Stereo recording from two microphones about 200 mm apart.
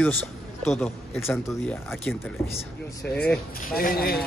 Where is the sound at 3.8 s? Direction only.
50° left (ahead or behind).